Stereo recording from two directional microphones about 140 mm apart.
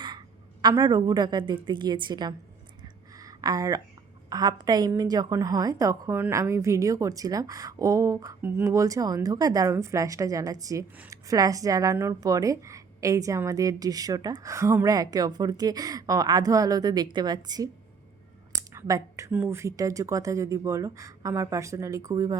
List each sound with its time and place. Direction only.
0.6 s a woman's voice: 30° right (ahead or behind)
3.2 s a sound: 25° right (ahead or behind)
4.3 s a woman's voice: 30° right (ahead or behind)